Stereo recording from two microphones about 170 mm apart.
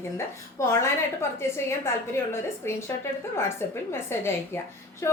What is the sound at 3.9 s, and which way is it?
A woman's voice, 15° left (ahead or behind).